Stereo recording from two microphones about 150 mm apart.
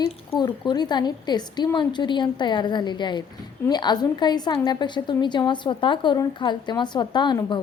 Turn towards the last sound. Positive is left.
turn(degrees=30)  # may be behind; listen again after turning